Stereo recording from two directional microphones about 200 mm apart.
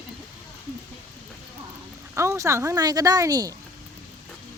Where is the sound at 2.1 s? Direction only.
15° right (ahead or behind).